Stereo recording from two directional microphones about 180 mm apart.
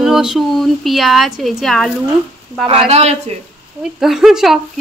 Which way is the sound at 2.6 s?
35° right (ahead or behind).